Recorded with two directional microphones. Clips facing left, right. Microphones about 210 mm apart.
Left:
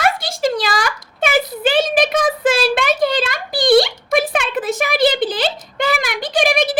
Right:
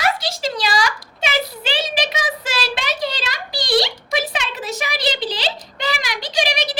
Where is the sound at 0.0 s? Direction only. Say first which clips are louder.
Left 4 dB; 50° left (ahead or behind).